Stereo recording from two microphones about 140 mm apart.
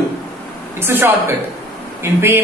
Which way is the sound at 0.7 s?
15° right (ahead or behind).